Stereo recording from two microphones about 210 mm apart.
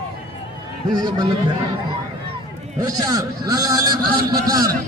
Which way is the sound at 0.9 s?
20° right (ahead or behind).